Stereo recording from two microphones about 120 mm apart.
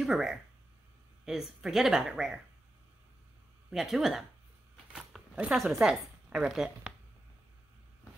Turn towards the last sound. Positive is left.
turn(degrees=-5)  # may be behind; listen again after turning